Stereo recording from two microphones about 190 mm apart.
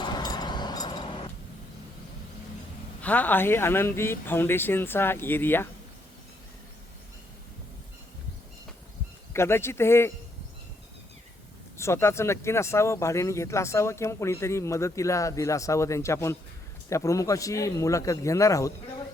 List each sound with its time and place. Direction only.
0.0 s a sound: 20° left (ahead or behind)
3.0 s speech: 10° left (ahead or behind)
9.3 s speech: 15° left (ahead or behind)
11.8 s speech: 15° left (ahead or behind)